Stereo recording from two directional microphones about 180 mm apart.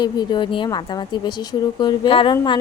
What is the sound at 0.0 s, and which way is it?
Speech, 25° left (ahead or behind).